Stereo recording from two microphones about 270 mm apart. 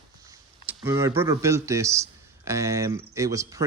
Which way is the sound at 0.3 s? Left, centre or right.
Centre.